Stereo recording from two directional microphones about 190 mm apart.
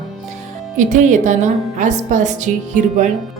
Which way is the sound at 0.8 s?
40° right (ahead or behind).